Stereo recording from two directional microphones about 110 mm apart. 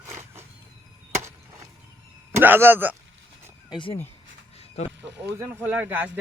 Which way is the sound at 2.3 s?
20° right (ahead or behind).